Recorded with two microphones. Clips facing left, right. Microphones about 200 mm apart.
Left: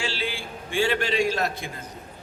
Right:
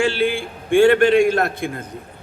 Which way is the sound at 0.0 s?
55° right (ahead or behind).